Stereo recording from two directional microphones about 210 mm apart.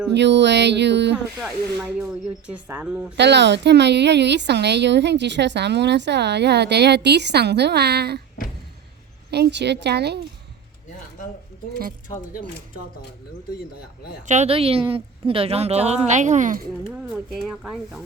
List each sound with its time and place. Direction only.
0.1 s a sound: 55° right (ahead or behind)
2.5 s speech: 5° right (ahead or behind)
3.2 s a woman's voice: 55° right (ahead or behind)
9.3 s a woman's voice: 55° right (ahead or behind)
14.3 s a woman's voice: 30° right (ahead or behind)
17.4 s speech: 5° right (ahead or behind)